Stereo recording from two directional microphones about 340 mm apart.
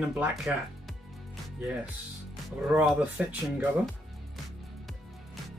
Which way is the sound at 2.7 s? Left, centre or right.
Centre.